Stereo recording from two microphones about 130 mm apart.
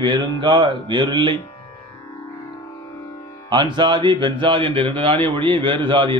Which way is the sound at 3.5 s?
35° right (ahead or behind).